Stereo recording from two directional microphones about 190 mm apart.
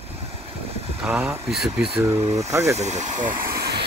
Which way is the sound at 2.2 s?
35° right (ahead or behind).